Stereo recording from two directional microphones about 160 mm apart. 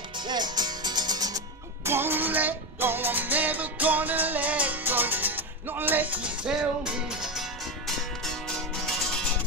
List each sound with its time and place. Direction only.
0.2 s music: 25° right (ahead or behind)
1.9 s music: 15° right (ahead or behind); by 9.3 s centre (ahead or behind)